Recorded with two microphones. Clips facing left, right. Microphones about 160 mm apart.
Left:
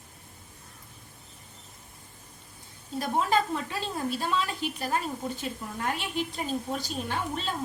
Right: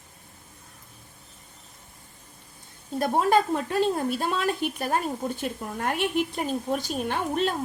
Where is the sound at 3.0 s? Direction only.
50° right (ahead or behind).